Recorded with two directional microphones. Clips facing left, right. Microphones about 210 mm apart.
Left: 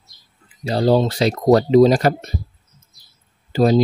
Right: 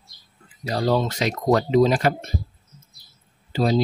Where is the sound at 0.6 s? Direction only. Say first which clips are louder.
Left 5 dB; 30° left (ahead or behind).